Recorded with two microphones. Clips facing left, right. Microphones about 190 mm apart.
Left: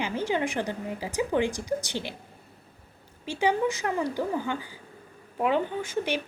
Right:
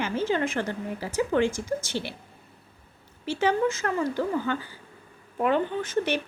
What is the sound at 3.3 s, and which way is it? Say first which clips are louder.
A woman's voice: right 1 dB; 15° left (ahead or behind).